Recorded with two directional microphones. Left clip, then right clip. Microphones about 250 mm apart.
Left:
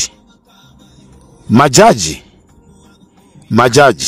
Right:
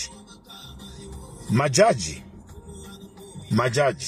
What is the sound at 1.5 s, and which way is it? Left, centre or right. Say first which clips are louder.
Speech: left 12 dB; left.